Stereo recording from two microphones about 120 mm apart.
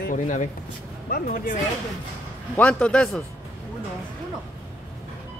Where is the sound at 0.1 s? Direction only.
90° left.